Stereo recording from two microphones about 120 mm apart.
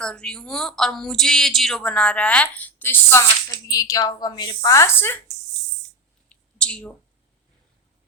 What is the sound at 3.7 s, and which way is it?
A woman's voice, 30° left (ahead or behind).